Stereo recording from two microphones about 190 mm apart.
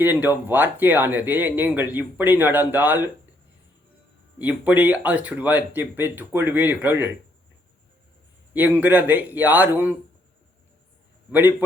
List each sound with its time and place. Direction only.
0.0 s speech: 10° right (ahead or behind)
4.4 s speech: 10° right (ahead or behind)
8.5 s speech: 10° right (ahead or behind)
11.3 s speech: 10° right (ahead or behind)